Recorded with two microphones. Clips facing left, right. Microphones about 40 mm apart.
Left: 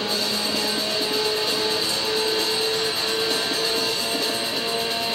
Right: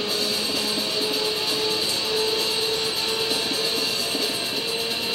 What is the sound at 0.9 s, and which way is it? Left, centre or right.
Music, left.